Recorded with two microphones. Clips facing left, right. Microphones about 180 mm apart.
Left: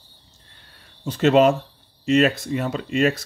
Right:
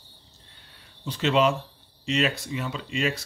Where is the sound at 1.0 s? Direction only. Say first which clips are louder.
Left 7 dB; 45° left (ahead or behind).